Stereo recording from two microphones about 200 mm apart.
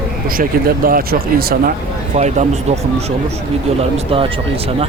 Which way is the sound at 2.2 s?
35° right (ahead or behind).